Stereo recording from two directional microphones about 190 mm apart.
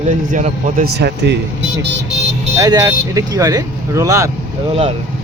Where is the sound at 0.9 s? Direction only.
65° right (ahead or behind).